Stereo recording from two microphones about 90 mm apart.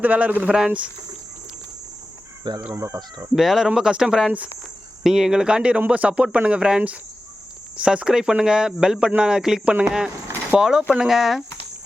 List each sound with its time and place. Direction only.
0.0 s speech: 15° right (ahead or behind)
2.4 s speech: 55° right (ahead or behind)
2.7 s speech: 30° right (ahead or behind)
3.3 s speech: 5° right (ahead or behind)